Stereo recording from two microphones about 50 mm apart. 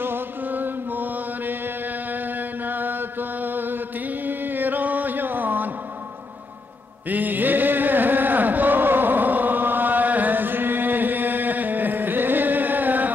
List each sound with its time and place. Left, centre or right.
0.0 s mantra: right
7.1 s music: right